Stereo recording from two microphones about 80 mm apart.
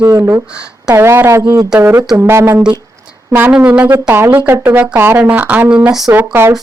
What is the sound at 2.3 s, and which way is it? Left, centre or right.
Speech, right.